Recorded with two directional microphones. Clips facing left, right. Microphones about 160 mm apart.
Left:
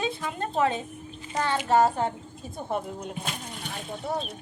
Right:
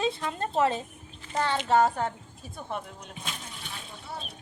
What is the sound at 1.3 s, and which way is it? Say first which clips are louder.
Speech: left 1 dB; centre (ahead or behind).